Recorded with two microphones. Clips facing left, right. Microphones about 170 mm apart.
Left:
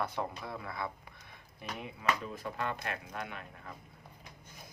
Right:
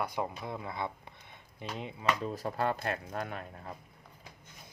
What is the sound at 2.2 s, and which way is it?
Speech, 40° right (ahead or behind).